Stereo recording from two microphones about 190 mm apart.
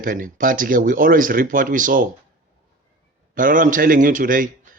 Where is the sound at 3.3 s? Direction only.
45° right (ahead or behind).